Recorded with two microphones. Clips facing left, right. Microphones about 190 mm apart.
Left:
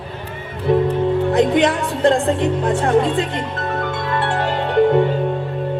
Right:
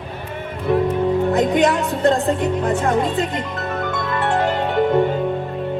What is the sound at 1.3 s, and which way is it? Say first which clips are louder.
Speech: left 3 dB; 45° right (ahead or behind).